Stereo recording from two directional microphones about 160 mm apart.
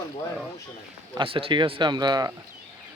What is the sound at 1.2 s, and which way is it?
Speech, 35° right (ahead or behind).